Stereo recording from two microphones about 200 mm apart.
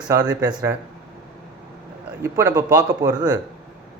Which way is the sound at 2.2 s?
15° right (ahead or behind).